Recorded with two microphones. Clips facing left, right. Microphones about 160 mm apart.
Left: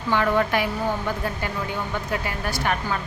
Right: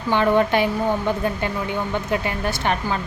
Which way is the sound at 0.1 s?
25° right (ahead or behind).